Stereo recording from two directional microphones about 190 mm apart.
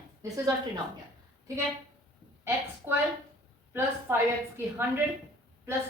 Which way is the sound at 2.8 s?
10° right (ahead or behind).